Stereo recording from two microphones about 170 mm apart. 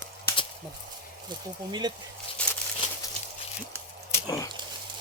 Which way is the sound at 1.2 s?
25° right (ahead or behind).